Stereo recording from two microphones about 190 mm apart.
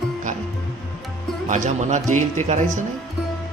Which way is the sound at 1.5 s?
40° right (ahead or behind).